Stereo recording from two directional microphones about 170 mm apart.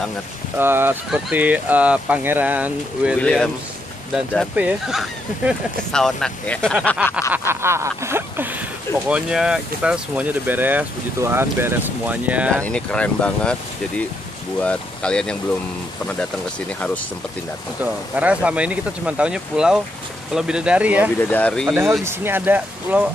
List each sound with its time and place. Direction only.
0.6 s speech: 10° right (ahead or behind)
3.2 s speech: 5° left (ahead or behind)
4.1 s speech: 5° right (ahead or behind)
7.1 s speech: 15° left (ahead or behind)
7.3 s speech: 15° right (ahead or behind)
12.6 s speech: 5° left (ahead or behind)
17.8 s speech: 10° right (ahead or behind)
21.2 s speech: 10° left (ahead or behind)
21.6 s speech: 5° right (ahead or behind)